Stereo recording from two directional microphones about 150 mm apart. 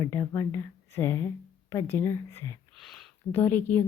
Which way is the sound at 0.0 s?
20° left (ahead or behind).